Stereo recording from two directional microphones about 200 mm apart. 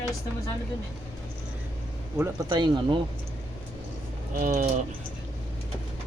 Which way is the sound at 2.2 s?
20° right (ahead or behind).